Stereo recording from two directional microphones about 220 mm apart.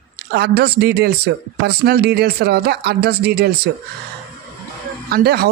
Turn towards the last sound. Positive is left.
turn(degrees=-45)  # may be behind; listen again after turning